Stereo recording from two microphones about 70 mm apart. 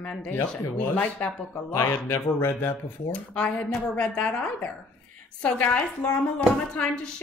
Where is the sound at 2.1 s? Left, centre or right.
Left.